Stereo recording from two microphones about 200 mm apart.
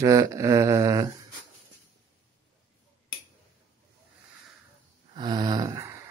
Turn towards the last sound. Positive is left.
turn(degrees=-15)  # may be behind; listen again after turning